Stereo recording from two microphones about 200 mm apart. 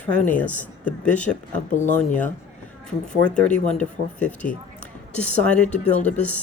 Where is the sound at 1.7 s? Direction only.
40° left (ahead or behind).